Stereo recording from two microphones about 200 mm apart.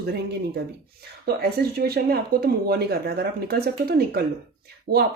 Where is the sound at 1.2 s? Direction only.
50° right (ahead or behind).